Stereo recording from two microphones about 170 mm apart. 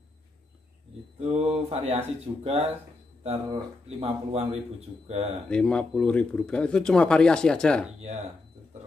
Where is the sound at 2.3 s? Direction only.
25° right (ahead or behind).